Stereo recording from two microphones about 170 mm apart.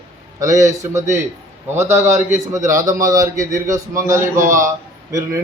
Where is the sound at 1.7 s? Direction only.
15° right (ahead or behind).